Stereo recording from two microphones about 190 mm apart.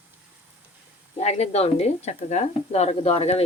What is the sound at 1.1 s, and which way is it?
A woman's voice, 35° left (ahead or behind).